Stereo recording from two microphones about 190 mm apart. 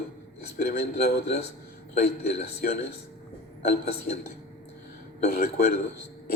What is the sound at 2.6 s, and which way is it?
Speech, 45° left (ahead or behind).